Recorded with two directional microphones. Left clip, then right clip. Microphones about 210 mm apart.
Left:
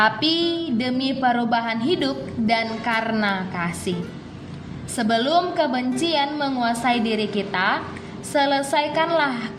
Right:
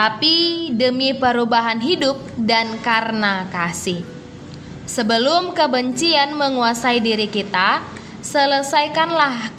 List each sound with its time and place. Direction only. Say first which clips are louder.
0.0 s a woman's voice: right 3 dB; 10° right (ahead or behind)
4.9 s a woman's voice: right 3 dB; 15° right (ahead or behind)